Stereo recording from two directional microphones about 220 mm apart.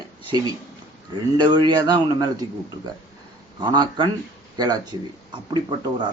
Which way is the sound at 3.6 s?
20° right (ahead or behind).